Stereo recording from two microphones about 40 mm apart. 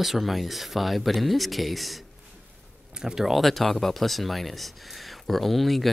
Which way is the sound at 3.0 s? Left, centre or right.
Centre.